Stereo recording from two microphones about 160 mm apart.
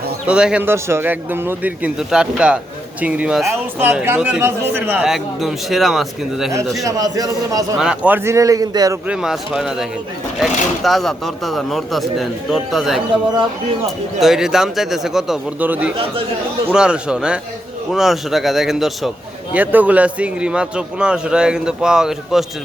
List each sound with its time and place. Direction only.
0.3 s speech: 5° right (ahead or behind)
5.0 s a man's voice: centre (ahead or behind)
6.8 s speech: 20° right (ahead or behind)
7.8 s speech: 5° right (ahead or behind); by 9.0 s 25° right (ahead or behind)
9.0 s a man's voice: 5° right (ahead or behind)
14.2 s a man's voice: centre (ahead or behind)